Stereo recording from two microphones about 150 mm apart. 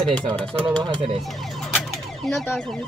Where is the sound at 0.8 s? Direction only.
35° right (ahead or behind).